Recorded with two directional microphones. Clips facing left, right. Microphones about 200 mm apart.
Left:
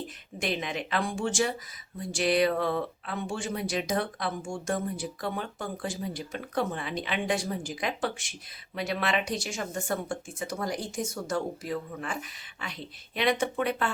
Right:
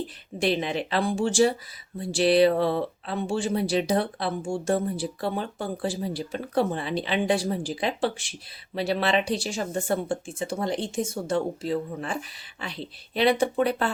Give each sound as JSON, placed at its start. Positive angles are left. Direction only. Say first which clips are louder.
{"t": 0.3, "sound": "speech", "louder": "right 6 dB", "side_deg": -30}